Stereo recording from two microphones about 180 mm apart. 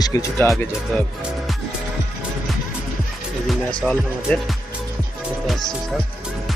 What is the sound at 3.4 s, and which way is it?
Speech, 5° left (ahead or behind).